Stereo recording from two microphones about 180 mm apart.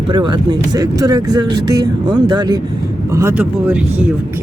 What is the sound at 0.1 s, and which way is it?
Speech, 25° right (ahead or behind).